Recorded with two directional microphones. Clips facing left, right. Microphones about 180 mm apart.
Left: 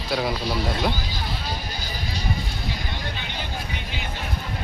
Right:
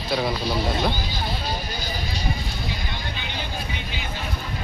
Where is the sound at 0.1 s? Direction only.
10° left (ahead or behind).